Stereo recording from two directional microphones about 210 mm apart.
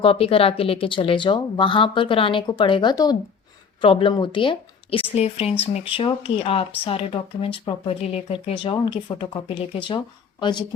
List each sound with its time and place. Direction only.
0.0 s a woman's voice: 25° left (ahead or behind)